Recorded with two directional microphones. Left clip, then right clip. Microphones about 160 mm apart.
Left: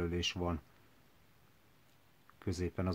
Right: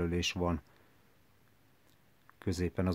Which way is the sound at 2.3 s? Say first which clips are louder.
Right 4 dB; 35° right (ahead or behind).